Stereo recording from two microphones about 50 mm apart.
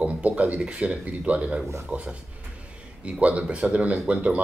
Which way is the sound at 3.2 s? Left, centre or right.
Right.